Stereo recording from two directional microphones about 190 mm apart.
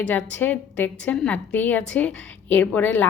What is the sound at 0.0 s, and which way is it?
A woman's voice, 10° left (ahead or behind).